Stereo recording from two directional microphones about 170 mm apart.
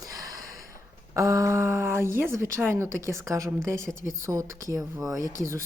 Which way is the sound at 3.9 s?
5° right (ahead or behind).